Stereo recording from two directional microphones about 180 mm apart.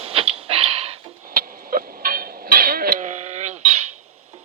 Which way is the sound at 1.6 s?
55° right (ahead or behind).